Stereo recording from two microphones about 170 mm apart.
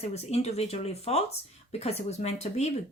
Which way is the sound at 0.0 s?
40° left (ahead or behind).